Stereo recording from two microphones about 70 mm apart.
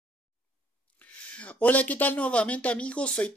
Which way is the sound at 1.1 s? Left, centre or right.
Centre.